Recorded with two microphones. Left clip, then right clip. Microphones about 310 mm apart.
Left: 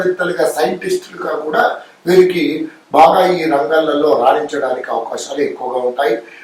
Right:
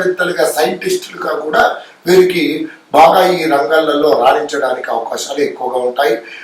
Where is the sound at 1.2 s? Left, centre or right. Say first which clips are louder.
Right 3 dB; centre.